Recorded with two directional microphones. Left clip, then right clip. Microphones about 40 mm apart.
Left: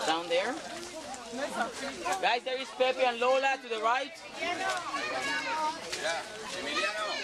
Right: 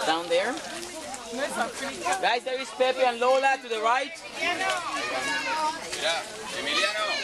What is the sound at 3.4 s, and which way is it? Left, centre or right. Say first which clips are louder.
Speech: right 5 dB; centre.